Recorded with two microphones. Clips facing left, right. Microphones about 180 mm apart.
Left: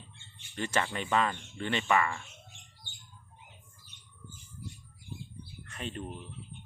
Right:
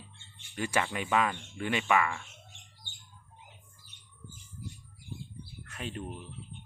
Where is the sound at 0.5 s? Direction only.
10° right (ahead or behind).